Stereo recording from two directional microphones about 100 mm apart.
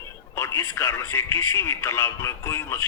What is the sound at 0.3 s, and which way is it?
Speech, 25° left (ahead or behind).